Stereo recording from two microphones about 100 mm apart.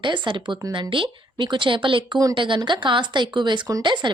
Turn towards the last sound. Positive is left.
turn(degrees=-50)  # may be behind; listen again after turning